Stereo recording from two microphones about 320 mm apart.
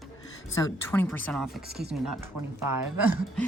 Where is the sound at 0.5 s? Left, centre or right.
Centre.